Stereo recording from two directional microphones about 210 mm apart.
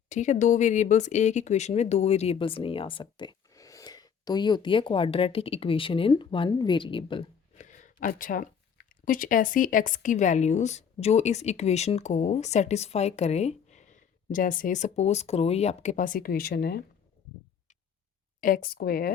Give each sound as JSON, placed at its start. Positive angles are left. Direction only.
{"t": 0.1, "sound": "speech", "side_deg": 35}
{"t": 7.6, "sound": "a sound", "side_deg": 35}
{"t": 9.0, "sound": "speech", "side_deg": 40}
{"t": 18.3, "sound": "speech", "side_deg": 40}